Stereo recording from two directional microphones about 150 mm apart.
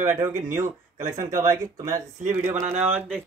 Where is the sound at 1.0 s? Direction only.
60° right (ahead or behind).